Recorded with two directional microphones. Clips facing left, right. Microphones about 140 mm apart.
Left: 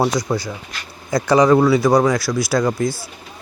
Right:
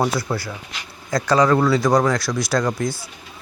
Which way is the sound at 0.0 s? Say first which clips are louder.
Left 3 dB; 15° left (ahead or behind).